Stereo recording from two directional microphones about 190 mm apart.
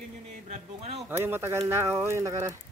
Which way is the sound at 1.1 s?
10° right (ahead or behind).